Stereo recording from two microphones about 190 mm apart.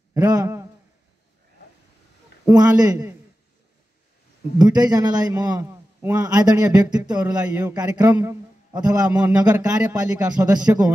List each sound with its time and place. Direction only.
0.1 s a sound: 15° right (ahead or behind)
2.4 s a man's voice: 20° right (ahead or behind)
4.7 s a man's voice: 20° right (ahead or behind)